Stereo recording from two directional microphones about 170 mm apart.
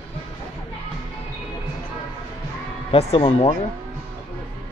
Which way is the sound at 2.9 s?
35° left (ahead or behind).